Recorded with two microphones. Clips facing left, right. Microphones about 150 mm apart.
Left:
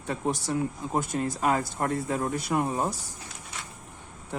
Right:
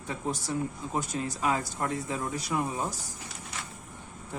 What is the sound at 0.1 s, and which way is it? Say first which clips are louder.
Speech: left 4 dB; 65° left (ahead or behind).